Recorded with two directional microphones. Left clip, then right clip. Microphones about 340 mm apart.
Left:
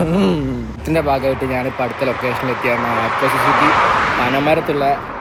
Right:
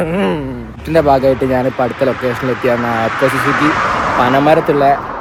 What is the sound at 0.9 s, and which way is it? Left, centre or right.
Speech, right.